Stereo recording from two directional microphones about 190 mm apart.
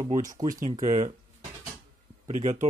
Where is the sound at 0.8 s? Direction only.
40° right (ahead or behind).